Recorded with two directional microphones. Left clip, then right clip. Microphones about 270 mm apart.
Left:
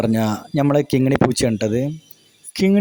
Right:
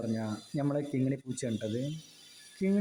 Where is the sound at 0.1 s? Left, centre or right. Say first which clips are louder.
Left 15 dB; left.